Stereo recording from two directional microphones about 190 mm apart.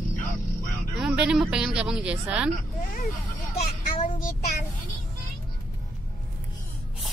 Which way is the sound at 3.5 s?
35° left (ahead or behind).